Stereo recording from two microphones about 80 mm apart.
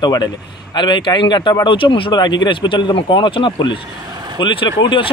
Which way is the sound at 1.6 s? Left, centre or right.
Left.